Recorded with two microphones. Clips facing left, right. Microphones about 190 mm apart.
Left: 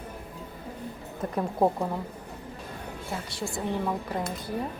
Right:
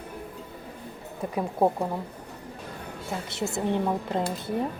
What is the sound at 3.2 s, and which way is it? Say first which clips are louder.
Speech: right 5 dB; 20° right (ahead or behind).